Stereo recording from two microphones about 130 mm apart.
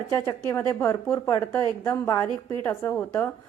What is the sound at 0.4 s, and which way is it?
A woman's voice, 20° left (ahead or behind).